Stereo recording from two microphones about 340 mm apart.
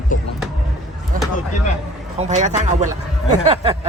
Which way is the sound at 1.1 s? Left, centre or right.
Right.